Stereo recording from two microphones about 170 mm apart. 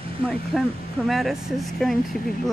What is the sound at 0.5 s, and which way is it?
Speech, centre (ahead or behind).